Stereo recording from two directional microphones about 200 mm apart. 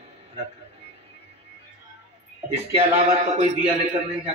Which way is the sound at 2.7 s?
35° right (ahead or behind).